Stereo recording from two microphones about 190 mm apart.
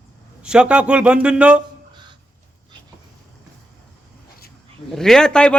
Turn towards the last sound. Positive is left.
turn(degrees=5)  # may be behind; listen again after turning